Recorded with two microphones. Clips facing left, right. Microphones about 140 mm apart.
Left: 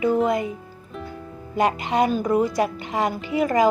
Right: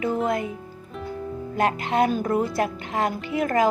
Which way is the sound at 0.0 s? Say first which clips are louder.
Left 4 dB; centre (ahead or behind).